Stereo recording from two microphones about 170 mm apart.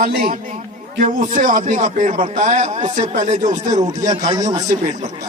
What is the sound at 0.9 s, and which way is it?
A man's voice, 50° right (ahead or behind).